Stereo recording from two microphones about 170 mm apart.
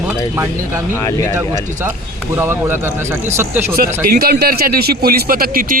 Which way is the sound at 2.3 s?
15° right (ahead or behind).